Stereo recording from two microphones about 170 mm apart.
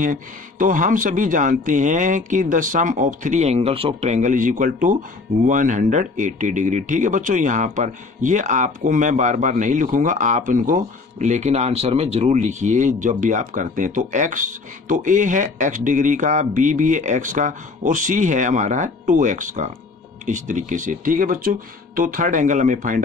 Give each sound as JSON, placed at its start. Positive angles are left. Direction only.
{"t": 0.0, "sound": "speech", "side_deg": -50}